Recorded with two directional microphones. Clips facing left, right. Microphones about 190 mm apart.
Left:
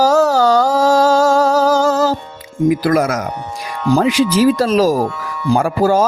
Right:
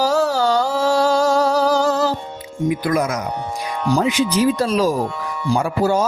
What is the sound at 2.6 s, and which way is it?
Speech, 85° left.